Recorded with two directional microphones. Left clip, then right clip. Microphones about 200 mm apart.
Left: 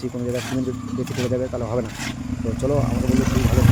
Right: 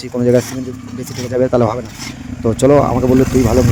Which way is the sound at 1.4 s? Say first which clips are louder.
Right 16 dB; 55° right (ahead or behind).